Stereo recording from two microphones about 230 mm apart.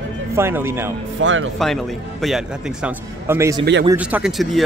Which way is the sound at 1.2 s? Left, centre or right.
Right.